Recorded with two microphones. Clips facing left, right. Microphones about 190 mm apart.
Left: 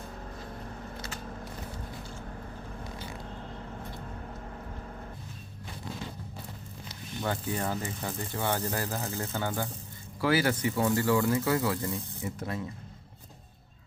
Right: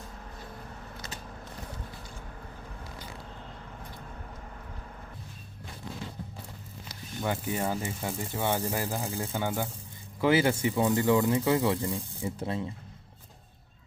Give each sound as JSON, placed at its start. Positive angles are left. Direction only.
{"t": 7.3, "sound": "speech", "side_deg": -10}
{"t": 10.2, "sound": "speech", "side_deg": -25}